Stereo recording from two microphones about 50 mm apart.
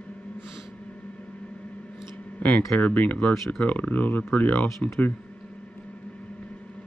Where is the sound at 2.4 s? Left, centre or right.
Left.